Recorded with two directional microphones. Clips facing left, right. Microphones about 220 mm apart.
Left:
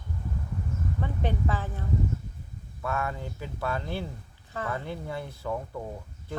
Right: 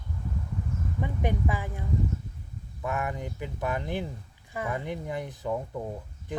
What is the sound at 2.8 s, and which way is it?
Speech, 15° right (ahead or behind).